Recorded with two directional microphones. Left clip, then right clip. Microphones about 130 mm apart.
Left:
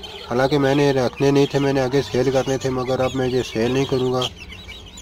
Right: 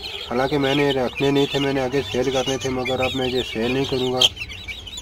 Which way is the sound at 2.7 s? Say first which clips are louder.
Left 1 dB; centre (ahead or behind).